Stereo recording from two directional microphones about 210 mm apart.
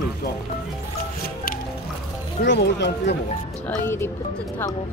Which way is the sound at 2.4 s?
55° left (ahead or behind).